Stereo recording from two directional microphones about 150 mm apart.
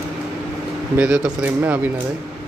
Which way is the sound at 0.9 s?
5° right (ahead or behind).